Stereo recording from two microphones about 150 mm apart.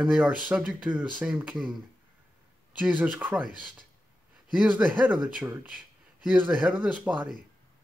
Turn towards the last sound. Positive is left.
turn(degrees=-5)  # may be behind; listen again after turning